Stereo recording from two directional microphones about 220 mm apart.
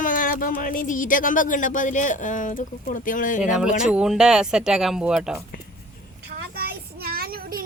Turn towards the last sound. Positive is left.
turn(degrees=-40)  # may be behind; listen again after turning